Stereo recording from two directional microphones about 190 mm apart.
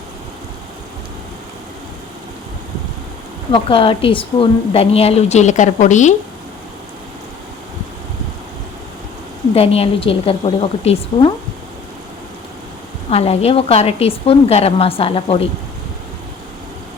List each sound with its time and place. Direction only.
3.5 s a woman's voice: 25° left (ahead or behind)
9.6 s a woman's voice: 30° left (ahead or behind)
13.1 s a woman's voice: 30° left (ahead or behind)